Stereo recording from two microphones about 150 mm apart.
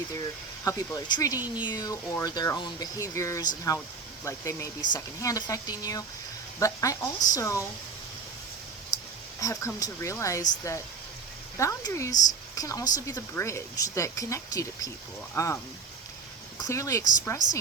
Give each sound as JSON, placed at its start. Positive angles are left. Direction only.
{"t": 0.6, "sound": "speech", "side_deg": 25}
{"t": 9.4, "sound": "speech", "side_deg": 20}
{"t": 16.6, "sound": "speech", "side_deg": 20}